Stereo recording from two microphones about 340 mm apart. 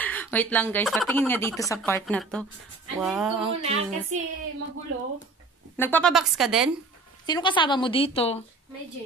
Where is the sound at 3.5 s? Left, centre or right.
Centre.